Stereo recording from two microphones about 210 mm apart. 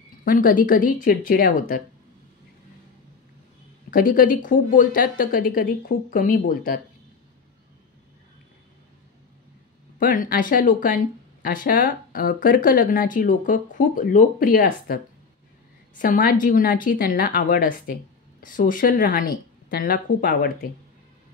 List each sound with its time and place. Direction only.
0.2 s speech: 40° left (ahead or behind)
3.9 s speech: 40° left (ahead or behind)
9.9 s speech: 40° left (ahead or behind)
16.0 s speech: 40° left (ahead or behind)